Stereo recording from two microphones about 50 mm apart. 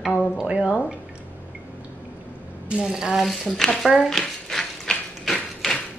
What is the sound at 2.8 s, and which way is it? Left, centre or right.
Speech, centre.